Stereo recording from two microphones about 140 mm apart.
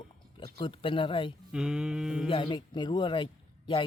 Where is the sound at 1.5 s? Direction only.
5° right (ahead or behind).